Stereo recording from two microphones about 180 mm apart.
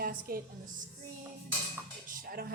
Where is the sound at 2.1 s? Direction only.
50° right (ahead or behind).